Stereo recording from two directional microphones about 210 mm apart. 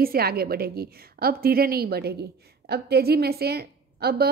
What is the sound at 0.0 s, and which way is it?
A woman's voice, 45° right (ahead or behind).